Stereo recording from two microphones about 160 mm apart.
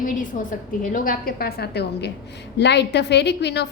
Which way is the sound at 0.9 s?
65° left (ahead or behind).